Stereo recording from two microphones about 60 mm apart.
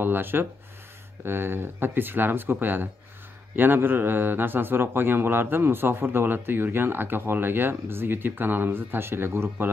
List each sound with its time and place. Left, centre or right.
0.0 s a man's voice: right